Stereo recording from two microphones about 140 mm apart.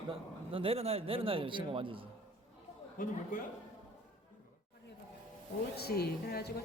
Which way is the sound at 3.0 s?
70° left (ahead or behind).